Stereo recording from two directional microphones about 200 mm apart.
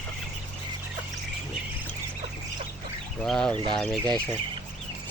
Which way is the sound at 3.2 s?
5° left (ahead or behind).